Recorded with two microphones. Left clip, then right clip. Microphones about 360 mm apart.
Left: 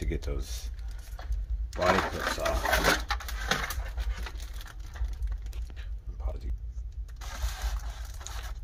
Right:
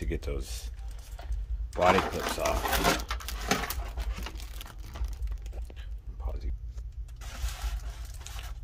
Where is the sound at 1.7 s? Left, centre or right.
Centre.